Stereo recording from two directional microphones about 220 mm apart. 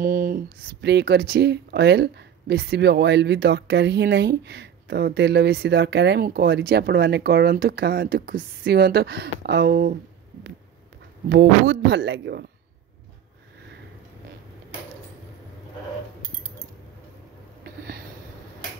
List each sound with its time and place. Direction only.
0.0 s speech: 40° right (ahead or behind)
11.2 s speech: 50° right (ahead or behind)
17.6 s a sound: 45° right (ahead or behind)